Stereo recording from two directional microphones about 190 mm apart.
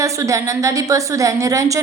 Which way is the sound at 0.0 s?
15° right (ahead or behind).